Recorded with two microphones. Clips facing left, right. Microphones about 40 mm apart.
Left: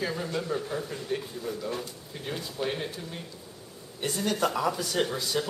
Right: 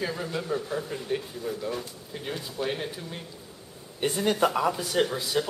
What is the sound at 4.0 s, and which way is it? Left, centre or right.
Speech, right.